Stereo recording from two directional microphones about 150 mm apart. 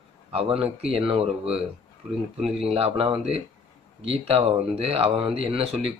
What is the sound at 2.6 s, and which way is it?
Speech, 40° right (ahead or behind).